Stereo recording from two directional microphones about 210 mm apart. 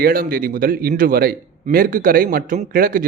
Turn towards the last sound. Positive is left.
turn(degrees=-40)  # may be behind; listen again after turning